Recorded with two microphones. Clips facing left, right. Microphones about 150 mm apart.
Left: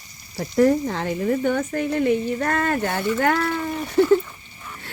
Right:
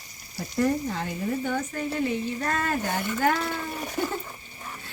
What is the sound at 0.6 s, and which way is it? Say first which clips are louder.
Speech: left 7 dB; 80° left.